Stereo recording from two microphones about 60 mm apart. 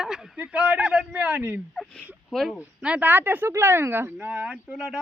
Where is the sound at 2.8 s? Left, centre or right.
Right.